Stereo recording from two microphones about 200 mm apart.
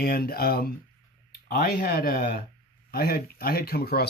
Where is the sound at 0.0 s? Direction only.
50° left (ahead or behind).